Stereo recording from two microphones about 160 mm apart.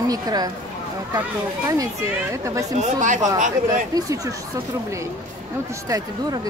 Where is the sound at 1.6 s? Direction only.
20° right (ahead or behind).